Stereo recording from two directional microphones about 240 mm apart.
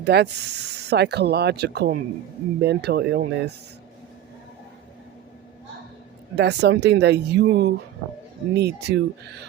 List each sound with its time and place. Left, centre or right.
0.0 s speech: right
6.3 s speech: right